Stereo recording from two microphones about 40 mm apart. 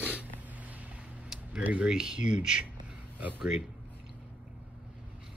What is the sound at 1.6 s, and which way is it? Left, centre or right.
Speech, right.